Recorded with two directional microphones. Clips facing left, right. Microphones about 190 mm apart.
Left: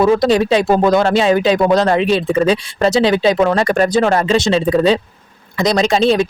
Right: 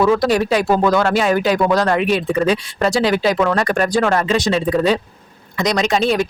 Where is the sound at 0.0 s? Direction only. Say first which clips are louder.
Left 3 dB; 20° left (ahead or behind).